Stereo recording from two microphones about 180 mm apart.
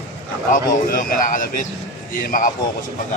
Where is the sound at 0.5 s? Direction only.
50° left (ahead or behind).